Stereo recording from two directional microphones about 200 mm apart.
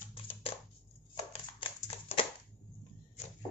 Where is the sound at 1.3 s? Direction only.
25° left (ahead or behind).